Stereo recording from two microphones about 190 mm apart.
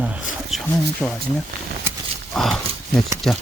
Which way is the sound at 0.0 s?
5° right (ahead or behind).